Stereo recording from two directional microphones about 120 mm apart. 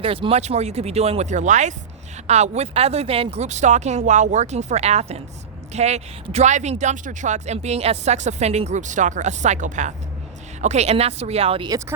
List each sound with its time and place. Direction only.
0.0 s speech: 50° right (ahead or behind); by 1.7 s 85° right
2.2 s speech: 70° right (ahead or behind); by 9.9 s 90° right
10.6 s speech: 70° right (ahead or behind); by 11.7 s 50° right (ahead or behind)